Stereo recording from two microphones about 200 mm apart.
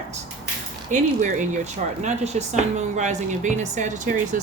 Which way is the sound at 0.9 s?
40° right (ahead or behind).